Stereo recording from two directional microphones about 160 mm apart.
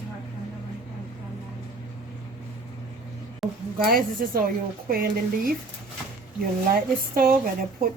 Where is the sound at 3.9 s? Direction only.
65° right (ahead or behind).